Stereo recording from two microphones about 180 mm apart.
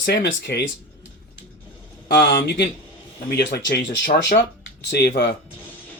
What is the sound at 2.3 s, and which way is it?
Speech, 60° left (ahead or behind).